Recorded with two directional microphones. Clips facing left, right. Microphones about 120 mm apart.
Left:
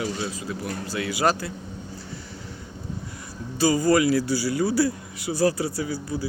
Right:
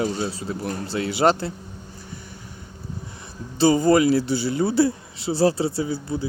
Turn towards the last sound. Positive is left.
turn(degrees=-25)  # may be behind; listen again after turning